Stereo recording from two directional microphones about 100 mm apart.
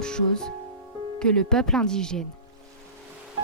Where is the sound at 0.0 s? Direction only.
10° left (ahead or behind).